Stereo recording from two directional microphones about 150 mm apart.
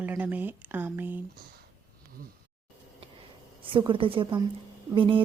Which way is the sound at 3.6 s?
35° right (ahead or behind).